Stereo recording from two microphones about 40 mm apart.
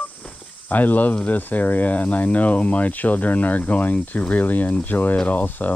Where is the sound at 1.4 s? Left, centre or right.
Left.